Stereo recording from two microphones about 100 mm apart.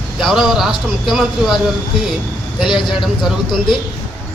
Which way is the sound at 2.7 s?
50° left (ahead or behind).